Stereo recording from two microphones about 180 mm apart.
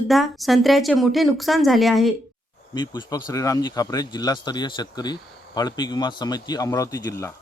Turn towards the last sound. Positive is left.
turn(degrees=20)  # may be behind; listen again after turning